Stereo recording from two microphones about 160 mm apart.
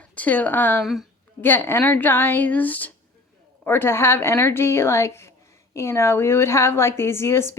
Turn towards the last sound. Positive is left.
turn(degrees=15)  # may be behind; listen again after turning